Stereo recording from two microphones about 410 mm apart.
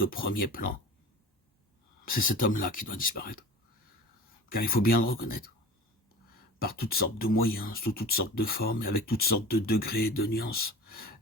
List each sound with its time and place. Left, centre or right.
0.0 s speech: left
2.1 s speech: centre
4.4 s speech: left
6.6 s speech: left